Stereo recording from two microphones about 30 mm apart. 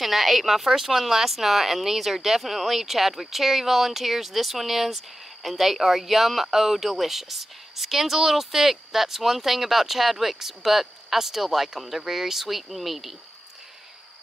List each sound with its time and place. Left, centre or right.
0.0 s speech: centre